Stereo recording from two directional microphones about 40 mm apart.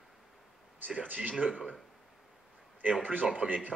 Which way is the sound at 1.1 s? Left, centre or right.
Right.